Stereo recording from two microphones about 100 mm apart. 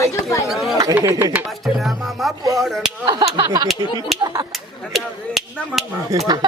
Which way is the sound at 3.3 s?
45° right (ahead or behind).